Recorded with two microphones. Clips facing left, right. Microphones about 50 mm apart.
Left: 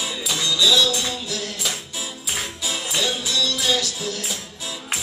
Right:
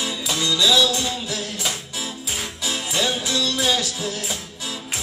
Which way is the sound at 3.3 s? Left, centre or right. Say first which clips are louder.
Right 1 dB; centre.